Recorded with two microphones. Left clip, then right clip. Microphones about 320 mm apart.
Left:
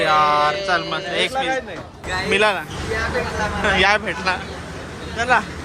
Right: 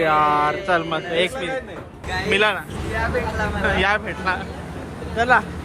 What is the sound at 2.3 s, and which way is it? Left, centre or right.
Speech, centre.